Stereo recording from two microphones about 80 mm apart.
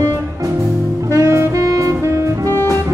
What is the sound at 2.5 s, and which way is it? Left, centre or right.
Music, left.